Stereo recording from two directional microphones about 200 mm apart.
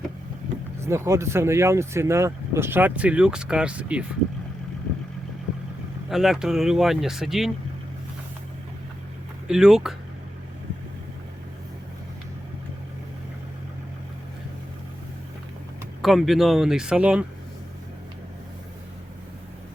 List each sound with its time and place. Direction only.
0.8 s speech: 15° right (ahead or behind)
6.1 s speech: centre (ahead or behind)
9.5 s speech: 5° right (ahead or behind)
16.0 s speech: centre (ahead or behind)